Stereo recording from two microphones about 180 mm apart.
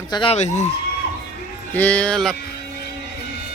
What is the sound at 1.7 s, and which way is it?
Speech, 10° left (ahead or behind).